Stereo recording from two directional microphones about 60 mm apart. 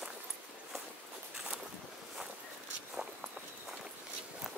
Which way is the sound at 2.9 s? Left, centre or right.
Centre.